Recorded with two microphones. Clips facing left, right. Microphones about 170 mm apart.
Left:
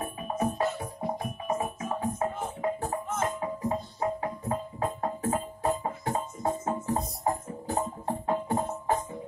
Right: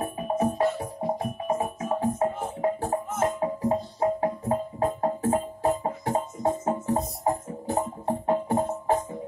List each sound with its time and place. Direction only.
0.3 s music: 30° right (ahead or behind)